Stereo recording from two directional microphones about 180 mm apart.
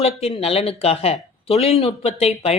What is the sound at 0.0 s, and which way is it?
A woman's voice, 35° left (ahead or behind).